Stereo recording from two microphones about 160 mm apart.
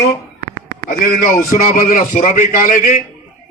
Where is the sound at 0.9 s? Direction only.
60° left (ahead or behind).